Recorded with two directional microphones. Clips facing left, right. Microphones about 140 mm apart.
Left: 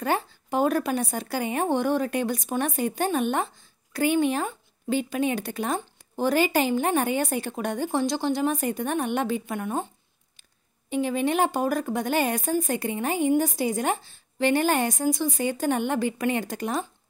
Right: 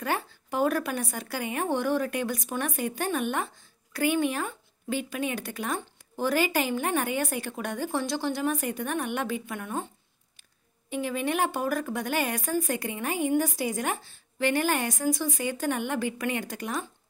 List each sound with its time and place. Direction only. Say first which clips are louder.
0.0 s a woman's voice: left 4 dB; 25° left (ahead or behind)
10.9 s a woman's voice: left 4 dB; 25° left (ahead or behind)